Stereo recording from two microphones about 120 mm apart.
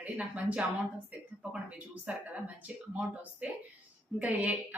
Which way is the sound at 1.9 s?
10° right (ahead or behind).